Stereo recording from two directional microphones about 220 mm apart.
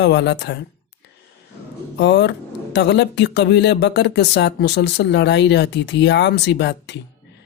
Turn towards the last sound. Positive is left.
turn(degrees=50)  # may be behind; listen again after turning